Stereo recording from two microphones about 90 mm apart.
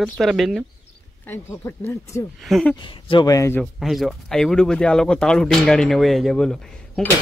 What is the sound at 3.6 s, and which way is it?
Speech, centre (ahead or behind).